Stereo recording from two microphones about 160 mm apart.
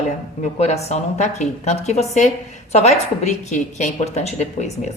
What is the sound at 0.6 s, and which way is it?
A woman's voice, 40° left (ahead or behind).